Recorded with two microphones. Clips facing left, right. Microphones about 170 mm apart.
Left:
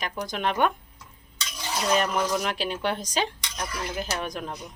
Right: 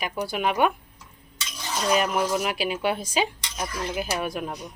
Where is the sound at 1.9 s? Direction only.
5° right (ahead or behind).